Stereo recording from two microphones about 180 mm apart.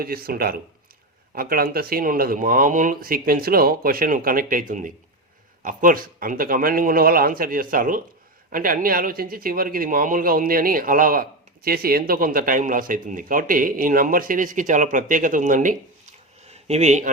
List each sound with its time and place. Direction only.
0.0 s speech: 55° right (ahead or behind)
5.6 s speech: 50° right (ahead or behind)
16.5 s a sound: 35° right (ahead or behind)